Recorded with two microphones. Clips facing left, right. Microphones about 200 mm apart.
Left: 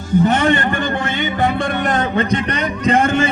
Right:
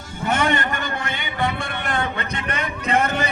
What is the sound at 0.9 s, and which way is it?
Speech, 50° left (ahead or behind).